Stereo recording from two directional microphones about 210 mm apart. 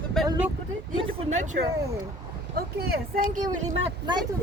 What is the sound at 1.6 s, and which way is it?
Speech, 50° right (ahead or behind).